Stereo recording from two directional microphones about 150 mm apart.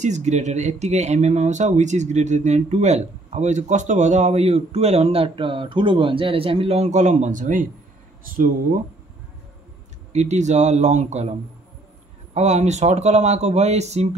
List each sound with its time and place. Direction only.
0.0 s speech: 50° right (ahead or behind); by 8.5 s 65° right (ahead or behind)
10.1 s speech: 50° right (ahead or behind)
12.4 s speech: 50° right (ahead or behind)